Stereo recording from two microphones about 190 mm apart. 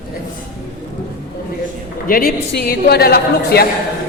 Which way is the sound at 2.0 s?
50° left (ahead or behind).